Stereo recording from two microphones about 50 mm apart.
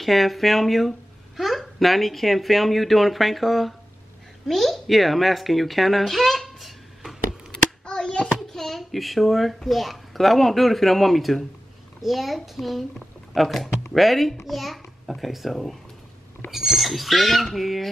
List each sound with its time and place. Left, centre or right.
0.0 s a woman's voice: centre
7.5 s hands: centre
8.4 s a child's voice: centre